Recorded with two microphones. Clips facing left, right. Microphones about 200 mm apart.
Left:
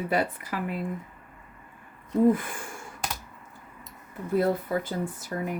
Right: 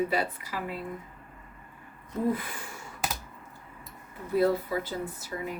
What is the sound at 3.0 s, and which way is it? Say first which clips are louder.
Computer keyboard: right 1 dB; 5° right (ahead or behind).